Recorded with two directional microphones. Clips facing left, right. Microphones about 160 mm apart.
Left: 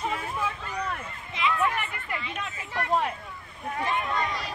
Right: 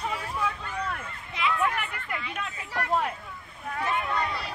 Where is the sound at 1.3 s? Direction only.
Centre (ahead or behind).